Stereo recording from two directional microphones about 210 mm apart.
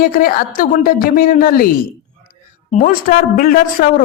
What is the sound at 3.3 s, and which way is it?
Speech, 40° left (ahead or behind).